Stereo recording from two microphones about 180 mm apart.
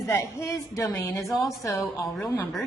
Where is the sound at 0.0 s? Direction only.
15° left (ahead or behind).